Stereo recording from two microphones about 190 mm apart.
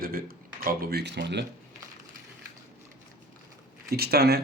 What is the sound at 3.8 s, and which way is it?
Speech, 55° right (ahead or behind).